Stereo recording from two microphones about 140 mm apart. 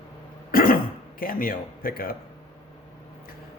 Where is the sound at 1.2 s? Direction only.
90° left.